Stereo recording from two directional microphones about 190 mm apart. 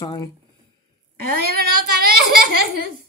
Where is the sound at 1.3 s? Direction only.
55° right (ahead or behind).